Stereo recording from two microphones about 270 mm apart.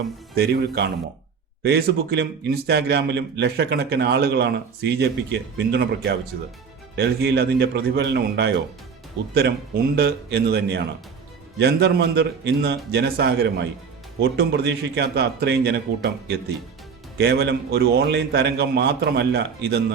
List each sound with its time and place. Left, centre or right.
0.3 s a man's voice: right
9.9 s a man's voice: right
17.2 s a man's voice: right